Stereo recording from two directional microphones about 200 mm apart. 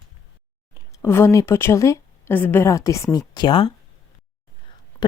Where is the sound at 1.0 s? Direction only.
10° left (ahead or behind).